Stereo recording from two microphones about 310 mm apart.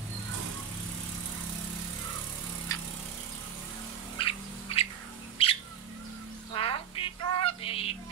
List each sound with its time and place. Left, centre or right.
4.2 s frog: centre
5.4 s bird: centre
6.5 s a sound: centre